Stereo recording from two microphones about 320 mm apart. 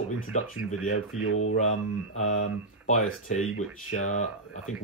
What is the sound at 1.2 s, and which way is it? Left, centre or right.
Mantra, left.